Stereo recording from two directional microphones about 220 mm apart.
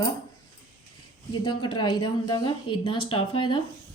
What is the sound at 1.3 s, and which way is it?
A woman's voice, 20° left (ahead or behind).